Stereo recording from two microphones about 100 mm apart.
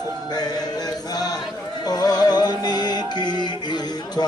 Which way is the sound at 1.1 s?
40° left (ahead or behind).